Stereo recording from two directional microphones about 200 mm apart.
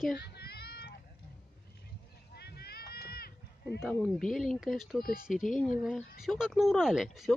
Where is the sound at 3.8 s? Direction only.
Centre (ahead or behind).